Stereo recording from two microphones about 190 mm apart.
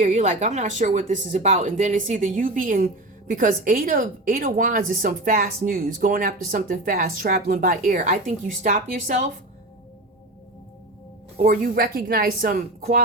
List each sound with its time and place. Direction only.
0.0 s speech: 40° right (ahead or behind)
11.3 s speech: 45° right (ahead or behind)